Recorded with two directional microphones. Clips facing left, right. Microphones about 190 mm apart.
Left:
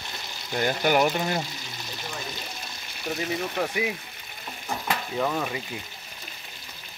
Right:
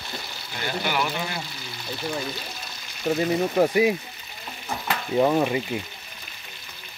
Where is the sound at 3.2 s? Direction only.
40° right (ahead or behind).